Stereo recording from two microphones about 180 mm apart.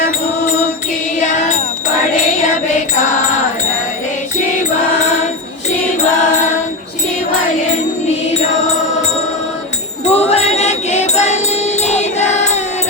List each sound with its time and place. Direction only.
1.2 s music: 40° left (ahead or behind)
10.1 s music: 35° left (ahead or behind)